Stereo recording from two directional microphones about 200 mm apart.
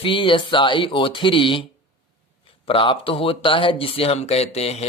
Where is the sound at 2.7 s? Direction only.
25° left (ahead or behind).